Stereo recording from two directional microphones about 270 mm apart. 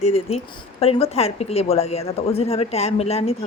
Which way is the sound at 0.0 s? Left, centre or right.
Left.